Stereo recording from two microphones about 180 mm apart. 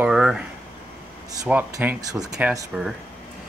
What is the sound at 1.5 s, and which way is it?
Speech, 10° right (ahead or behind).